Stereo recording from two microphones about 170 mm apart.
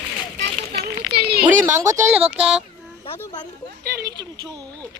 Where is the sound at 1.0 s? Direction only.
70° right (ahead or behind).